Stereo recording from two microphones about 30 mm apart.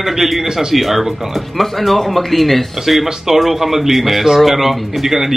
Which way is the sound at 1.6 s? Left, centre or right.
Centre.